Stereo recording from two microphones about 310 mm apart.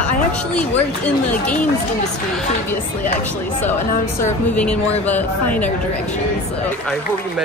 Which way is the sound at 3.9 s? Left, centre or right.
Left.